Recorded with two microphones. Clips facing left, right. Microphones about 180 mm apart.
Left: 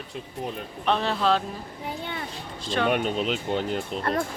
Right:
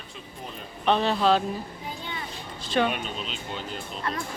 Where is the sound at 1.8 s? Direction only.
60° left (ahead or behind).